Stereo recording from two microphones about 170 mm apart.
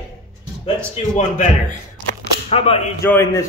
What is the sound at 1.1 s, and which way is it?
A man's voice, 45° left (ahead or behind).